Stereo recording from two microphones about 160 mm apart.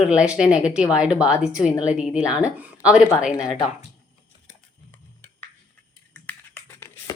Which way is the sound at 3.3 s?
25° left (ahead or behind).